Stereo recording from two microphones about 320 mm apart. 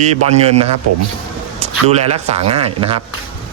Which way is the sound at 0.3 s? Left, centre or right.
Centre.